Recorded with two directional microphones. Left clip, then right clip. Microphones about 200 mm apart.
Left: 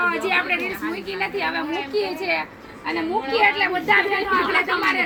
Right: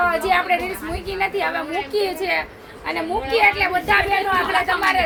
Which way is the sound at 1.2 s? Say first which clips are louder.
Right 3 dB; 45° right (ahead or behind).